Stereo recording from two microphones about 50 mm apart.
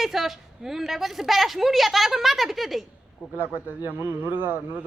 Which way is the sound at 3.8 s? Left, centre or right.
Right.